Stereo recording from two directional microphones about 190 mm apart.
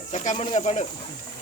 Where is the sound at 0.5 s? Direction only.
40° left (ahead or behind).